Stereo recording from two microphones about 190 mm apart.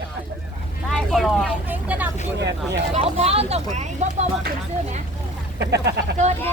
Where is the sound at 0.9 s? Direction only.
Centre (ahead or behind).